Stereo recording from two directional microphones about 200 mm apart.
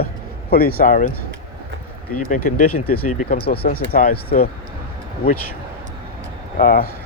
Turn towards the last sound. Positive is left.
turn(degrees=45)  # may be behind; listen again after turning